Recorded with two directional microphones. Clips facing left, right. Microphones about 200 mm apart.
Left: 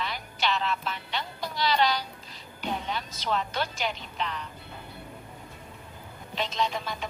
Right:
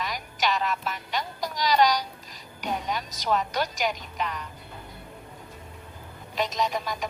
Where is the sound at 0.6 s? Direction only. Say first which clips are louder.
Right 2 dB; 40° right (ahead or behind).